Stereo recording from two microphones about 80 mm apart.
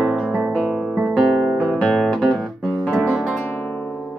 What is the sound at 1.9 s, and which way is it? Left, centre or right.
Guitar, centre.